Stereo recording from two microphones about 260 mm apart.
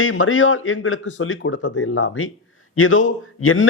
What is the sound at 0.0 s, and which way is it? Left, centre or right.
A man's voice, left.